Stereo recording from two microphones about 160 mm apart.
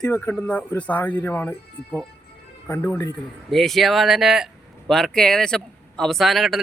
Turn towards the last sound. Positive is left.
turn(degrees=0)  # may be behind; listen again after turning